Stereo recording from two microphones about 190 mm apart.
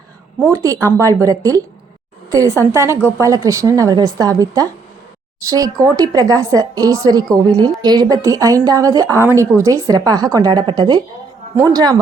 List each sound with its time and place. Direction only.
0.5 s a woman's voice: 15° right (ahead or behind)